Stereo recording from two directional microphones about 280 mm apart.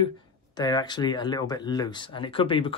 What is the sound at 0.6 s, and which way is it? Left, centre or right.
Speech, centre.